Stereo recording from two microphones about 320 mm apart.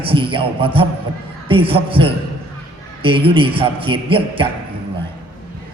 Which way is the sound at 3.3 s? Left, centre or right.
Centre.